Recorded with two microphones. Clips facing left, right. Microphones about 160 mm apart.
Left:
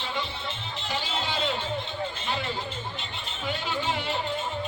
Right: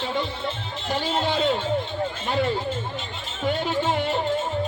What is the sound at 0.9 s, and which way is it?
Music, 50° right (ahead or behind).